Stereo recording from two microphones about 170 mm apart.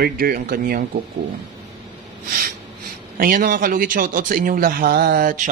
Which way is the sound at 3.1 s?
55° right (ahead or behind).